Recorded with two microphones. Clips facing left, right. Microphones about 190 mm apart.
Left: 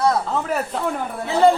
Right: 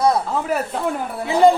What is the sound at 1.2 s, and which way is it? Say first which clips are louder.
Speech: right 2 dB; 15° right (ahead or behind).